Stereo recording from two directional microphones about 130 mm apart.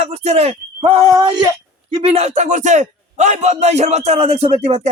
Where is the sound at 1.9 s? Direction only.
50° right (ahead or behind).